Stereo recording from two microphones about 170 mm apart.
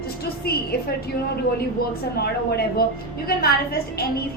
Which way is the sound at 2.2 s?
65° left (ahead or behind).